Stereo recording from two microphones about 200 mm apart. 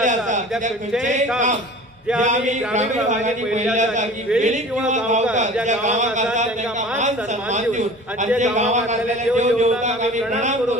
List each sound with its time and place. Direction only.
0.0 s a sound: 40° right (ahead or behind)
2.2 s a man's voice: 35° right (ahead or behind)
7.5 s a man's voice: 35° right (ahead or behind)